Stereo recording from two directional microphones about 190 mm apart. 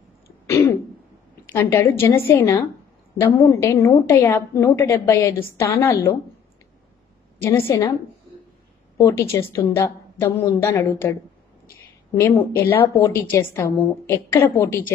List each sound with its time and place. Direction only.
0.5 s throat clearing: 15° left (ahead or behind)
1.4 s a woman's voice: 10° left (ahead or behind)
7.4 s a woman's voice: 10° left (ahead or behind)
8.9 s a woman's voice: 15° left (ahead or behind)
12.2 s a woman's voice: 15° left (ahead or behind)